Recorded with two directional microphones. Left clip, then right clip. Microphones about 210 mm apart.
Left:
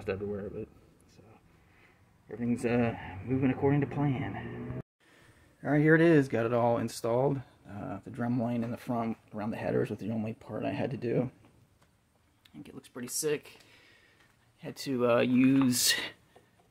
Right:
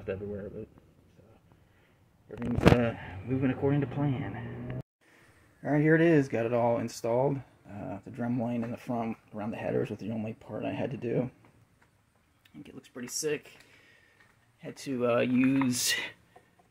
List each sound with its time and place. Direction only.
0.0 s a man's voice: 20° left (ahead or behind)
2.8 s speech: 5° left (ahead or behind)
5.6 s speech: 5° left (ahead or behind)
12.4 s speech: 5° left (ahead or behind)